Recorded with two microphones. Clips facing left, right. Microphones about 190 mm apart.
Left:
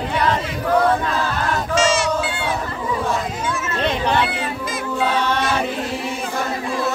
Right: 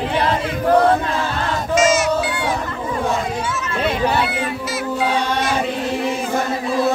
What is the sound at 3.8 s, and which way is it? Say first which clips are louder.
Children playing: right 1 dB; 10° right (ahead or behind).